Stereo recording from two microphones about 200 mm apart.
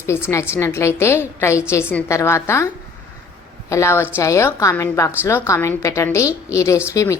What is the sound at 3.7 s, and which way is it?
A woman's voice, 15° left (ahead or behind).